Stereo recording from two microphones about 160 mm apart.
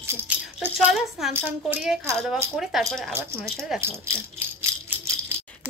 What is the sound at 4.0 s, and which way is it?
Rattle, 15° right (ahead or behind).